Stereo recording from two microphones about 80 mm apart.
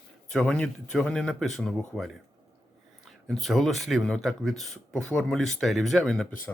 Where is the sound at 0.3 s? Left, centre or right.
Centre.